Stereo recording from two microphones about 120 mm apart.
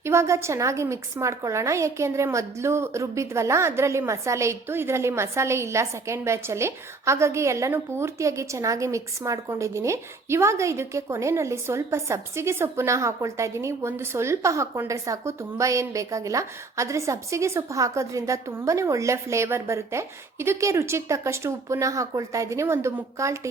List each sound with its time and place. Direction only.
0.0 s a woman's voice: 25° right (ahead or behind)